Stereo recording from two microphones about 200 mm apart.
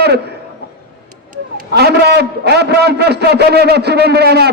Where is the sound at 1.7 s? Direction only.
55° right (ahead or behind).